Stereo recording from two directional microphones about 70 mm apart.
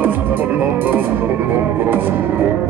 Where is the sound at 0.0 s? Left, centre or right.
Right.